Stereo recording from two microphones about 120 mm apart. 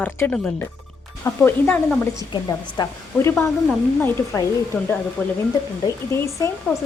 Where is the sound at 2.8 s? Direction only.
35° left (ahead or behind).